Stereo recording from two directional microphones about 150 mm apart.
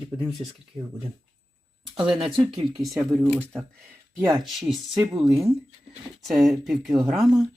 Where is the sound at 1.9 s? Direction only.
35° right (ahead or behind).